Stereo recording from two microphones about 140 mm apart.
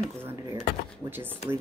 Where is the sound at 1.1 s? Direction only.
15° right (ahead or behind).